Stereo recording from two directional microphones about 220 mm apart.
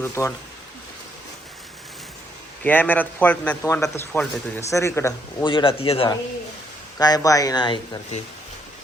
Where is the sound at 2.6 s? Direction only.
10° left (ahead or behind).